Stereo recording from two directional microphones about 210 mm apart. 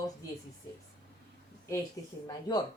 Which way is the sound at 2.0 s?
15° left (ahead or behind).